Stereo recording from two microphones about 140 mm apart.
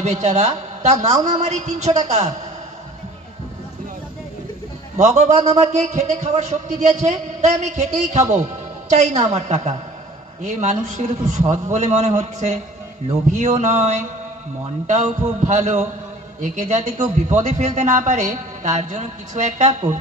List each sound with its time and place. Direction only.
0.0 s a woman's voice: 50° right (ahead or behind)
4.9 s a man's voice: 55° right (ahead or behind)